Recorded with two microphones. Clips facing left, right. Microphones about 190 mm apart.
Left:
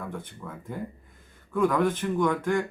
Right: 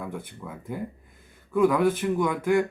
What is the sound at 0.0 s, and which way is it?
Speech, 10° right (ahead or behind).